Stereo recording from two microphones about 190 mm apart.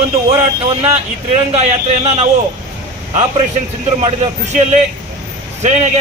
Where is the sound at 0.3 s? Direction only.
30° right (ahead or behind).